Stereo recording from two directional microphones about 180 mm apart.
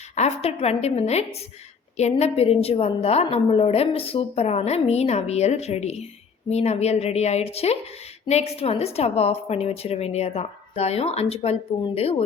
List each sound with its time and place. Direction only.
0.2 s a woman's voice: 35° left (ahead or behind)